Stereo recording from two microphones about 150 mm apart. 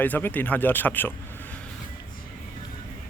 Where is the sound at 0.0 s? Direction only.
10° left (ahead or behind).